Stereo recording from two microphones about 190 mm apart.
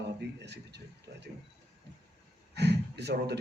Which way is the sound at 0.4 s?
60° right (ahead or behind).